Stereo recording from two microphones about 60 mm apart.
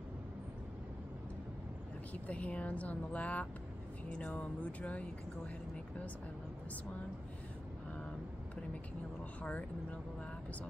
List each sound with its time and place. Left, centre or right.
2.1 s speech: left
9.4 s speech: left